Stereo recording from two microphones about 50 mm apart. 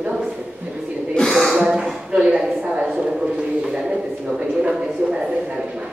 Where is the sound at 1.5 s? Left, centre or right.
Centre.